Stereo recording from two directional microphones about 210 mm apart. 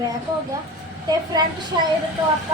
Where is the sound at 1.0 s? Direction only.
20° right (ahead or behind).